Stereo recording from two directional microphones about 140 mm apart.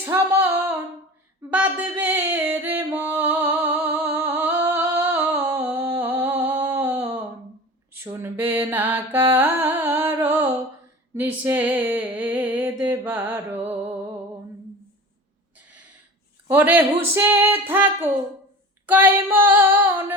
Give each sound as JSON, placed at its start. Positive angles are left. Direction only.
{"t": 0.0, "sound": "female singing", "side_deg": -15}
{"t": 1.5, "sound": "music", "side_deg": -15}
{"t": 5.5, "sound": "a sound", "side_deg": -15}
{"t": 7.9, "sound": "mantra", "side_deg": -15}
{"t": 11.1, "sound": "a sound", "side_deg": -15}
{"t": 16.5, "sound": "speech", "side_deg": -15}